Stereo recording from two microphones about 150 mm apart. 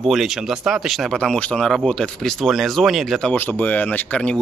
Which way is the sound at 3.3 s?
10° left (ahead or behind).